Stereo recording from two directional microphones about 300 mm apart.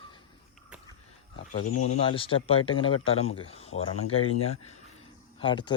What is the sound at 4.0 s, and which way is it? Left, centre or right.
Speech, left.